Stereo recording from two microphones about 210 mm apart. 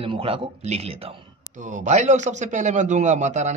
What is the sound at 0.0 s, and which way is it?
A man's voice, 25° right (ahead or behind).